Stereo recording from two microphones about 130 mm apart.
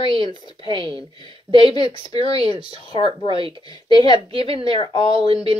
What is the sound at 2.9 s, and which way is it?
Speech, 40° left (ahead or behind).